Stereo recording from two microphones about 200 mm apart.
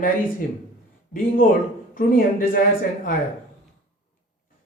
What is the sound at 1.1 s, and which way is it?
Speech, 45° left (ahead or behind).